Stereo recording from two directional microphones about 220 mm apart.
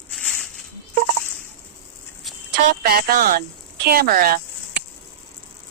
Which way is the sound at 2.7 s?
40° right (ahead or behind).